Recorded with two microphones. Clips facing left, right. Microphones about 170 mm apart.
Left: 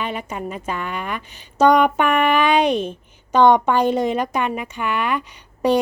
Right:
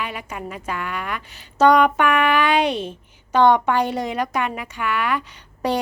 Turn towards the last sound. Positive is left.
turn(degrees=15)  # may be behind; listen again after turning